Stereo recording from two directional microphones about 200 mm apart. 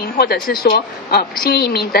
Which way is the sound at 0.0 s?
50° left (ahead or behind).